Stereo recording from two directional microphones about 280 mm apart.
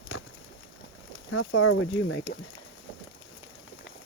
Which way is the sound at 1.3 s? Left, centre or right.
Left.